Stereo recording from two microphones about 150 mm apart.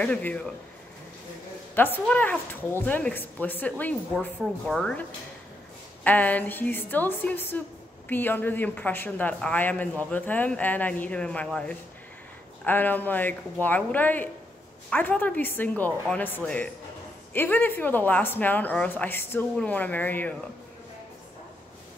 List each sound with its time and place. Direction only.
0.0 s a woman's voice: 10° left (ahead or behind)
1.8 s a woman's voice: 10° left (ahead or behind)
6.0 s a woman's voice: 10° left (ahead or behind)